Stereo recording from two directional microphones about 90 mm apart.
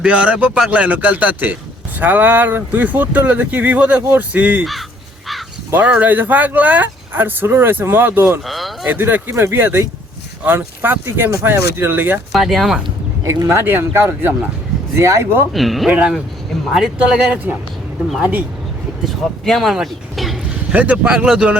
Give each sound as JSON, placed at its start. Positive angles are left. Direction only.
{"t": 0.0, "sound": "speech", "side_deg": -10}
{"t": 5.7, "sound": "speech", "side_deg": -15}
{"t": 8.4, "sound": "a sound", "side_deg": 0}
{"t": 8.9, "sound": "speech", "side_deg": -20}
{"t": 12.3, "sound": "speech", "side_deg": 0}
{"t": 13.2, "sound": "speech", "side_deg": -30}
{"t": 15.5, "sound": "speech", "side_deg": 0}
{"t": 15.9, "sound": "speech", "side_deg": -15}
{"t": 18.2, "sound": "speech", "side_deg": -15}
{"t": 19.0, "sound": "speech", "side_deg": 0}
{"t": 20.7, "sound": "speech", "side_deg": -15}